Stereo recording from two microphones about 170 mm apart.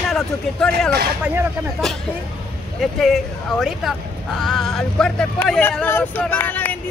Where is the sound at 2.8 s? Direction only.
Centre (ahead or behind).